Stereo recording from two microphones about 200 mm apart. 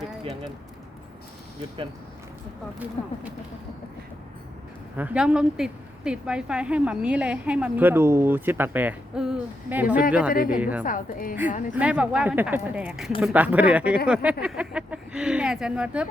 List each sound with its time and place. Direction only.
3.0 s speech: 30° left (ahead or behind)
4.9 s a woman's voice: 5° right (ahead or behind)
10.3 s a woman's voice: 45° left (ahead or behind)
10.6 s a woman's voice: 5° right (ahead or behind)
10.8 s a woman's voice: 45° left (ahead or behind)
11.7 s a woman's voice: 5° right (ahead or behind)